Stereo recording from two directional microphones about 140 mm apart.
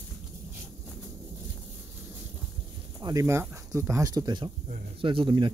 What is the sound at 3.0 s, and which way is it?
Speech, 20° right (ahead or behind).